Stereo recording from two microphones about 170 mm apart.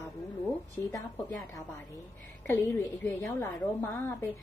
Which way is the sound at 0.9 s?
20° left (ahead or behind).